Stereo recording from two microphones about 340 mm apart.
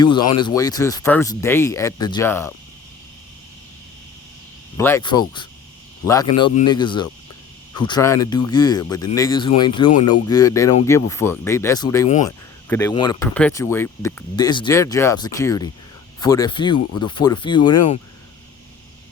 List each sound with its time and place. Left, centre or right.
0.0 s speech: centre
4.8 s speech: centre
6.4 s speech: centre